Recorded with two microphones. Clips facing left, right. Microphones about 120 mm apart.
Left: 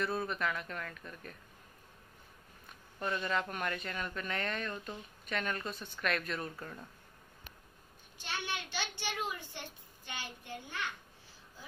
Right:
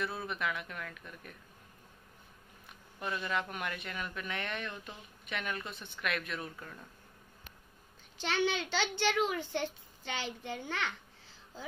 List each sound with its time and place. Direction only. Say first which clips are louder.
0.0 s speech: left 2 dB; 5° right (ahead or behind)
3.0 s a woman's voice: left 1 dB; 10° right (ahead or behind)
8.2 s a child's voice: right 8 dB; 90° right